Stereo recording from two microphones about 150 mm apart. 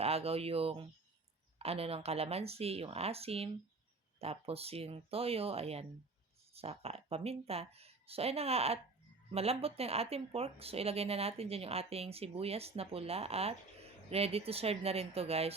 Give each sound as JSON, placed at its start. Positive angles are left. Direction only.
{"t": 0.0, "sound": "speech", "side_deg": -40}